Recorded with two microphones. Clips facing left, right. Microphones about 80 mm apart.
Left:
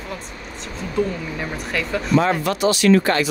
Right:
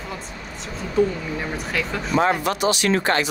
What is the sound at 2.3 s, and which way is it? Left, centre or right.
Speech, centre.